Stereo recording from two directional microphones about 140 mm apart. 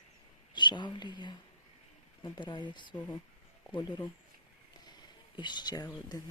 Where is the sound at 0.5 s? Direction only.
35° left (ahead or behind).